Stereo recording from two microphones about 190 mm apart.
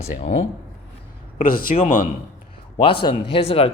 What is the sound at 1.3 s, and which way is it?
Speech, 45° left (ahead or behind).